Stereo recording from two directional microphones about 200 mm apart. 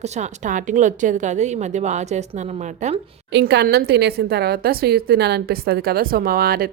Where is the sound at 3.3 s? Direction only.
55° right (ahead or behind).